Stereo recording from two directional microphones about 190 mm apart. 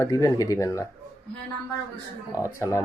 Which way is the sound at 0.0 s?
15° left (ahead or behind).